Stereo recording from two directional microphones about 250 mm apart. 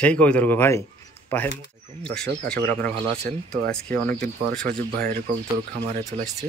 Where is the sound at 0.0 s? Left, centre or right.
Centre.